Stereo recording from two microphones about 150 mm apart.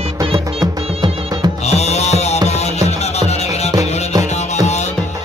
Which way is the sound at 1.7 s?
45° left (ahead or behind).